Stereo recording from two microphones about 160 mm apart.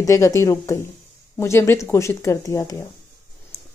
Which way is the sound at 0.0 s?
20° left (ahead or behind).